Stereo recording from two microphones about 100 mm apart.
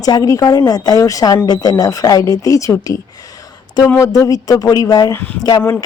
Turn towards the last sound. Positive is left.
turn(degrees=40)  # may be behind; listen again after turning